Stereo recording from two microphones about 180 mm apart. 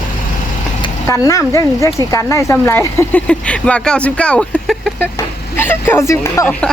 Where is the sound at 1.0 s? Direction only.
15° left (ahead or behind).